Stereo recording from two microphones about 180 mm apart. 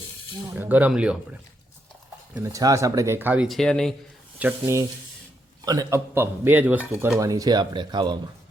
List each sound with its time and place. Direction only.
0.5 s speech: 10° right (ahead or behind)
2.3 s speech: 15° right (ahead or behind); by 3.9 s 5° left (ahead or behind)
4.6 s speech: 15° right (ahead or behind)